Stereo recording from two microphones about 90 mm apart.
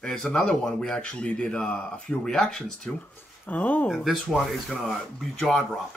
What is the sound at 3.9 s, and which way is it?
Speech, centre (ahead or behind).